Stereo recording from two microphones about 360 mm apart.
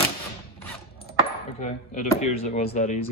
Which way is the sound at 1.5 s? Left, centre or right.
Centre.